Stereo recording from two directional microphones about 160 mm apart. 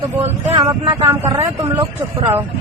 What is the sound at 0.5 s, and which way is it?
Speech, 25° right (ahead or behind).